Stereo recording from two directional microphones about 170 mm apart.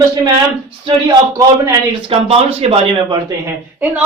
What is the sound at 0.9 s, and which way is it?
Speech, 25° right (ahead or behind).